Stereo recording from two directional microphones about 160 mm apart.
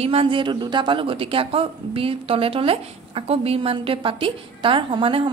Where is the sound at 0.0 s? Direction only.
35° right (ahead or behind).